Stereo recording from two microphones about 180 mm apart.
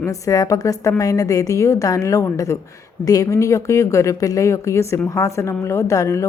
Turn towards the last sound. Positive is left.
turn(degrees=15)  # may be behind; listen again after turning